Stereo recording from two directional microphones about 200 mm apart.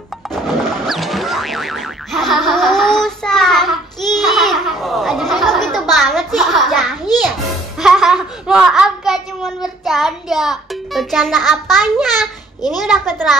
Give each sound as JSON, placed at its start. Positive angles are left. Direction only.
{"t": 0.3, "sound": "boing", "side_deg": 0}
{"t": 7.8, "sound": "speech", "side_deg": 0}
{"t": 12.8, "sound": "a child's voice", "side_deg": 0}